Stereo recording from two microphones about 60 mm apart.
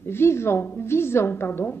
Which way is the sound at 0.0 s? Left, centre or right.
Left.